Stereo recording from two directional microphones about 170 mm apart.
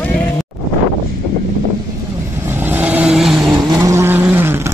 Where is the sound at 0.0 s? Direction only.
5° left (ahead or behind).